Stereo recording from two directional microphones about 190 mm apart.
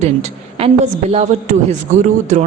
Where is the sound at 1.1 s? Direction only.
40° right (ahead or behind).